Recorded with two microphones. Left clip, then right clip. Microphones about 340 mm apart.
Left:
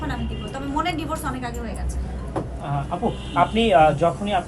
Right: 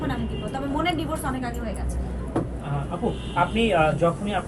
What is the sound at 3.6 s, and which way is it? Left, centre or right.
Speech, left.